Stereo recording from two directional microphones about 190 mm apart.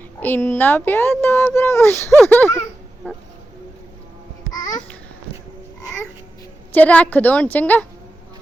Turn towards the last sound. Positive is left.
turn(degrees=10)  # may be behind; listen again after turning